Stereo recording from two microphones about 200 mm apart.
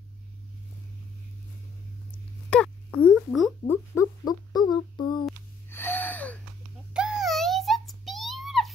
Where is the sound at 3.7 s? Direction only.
15° left (ahead or behind).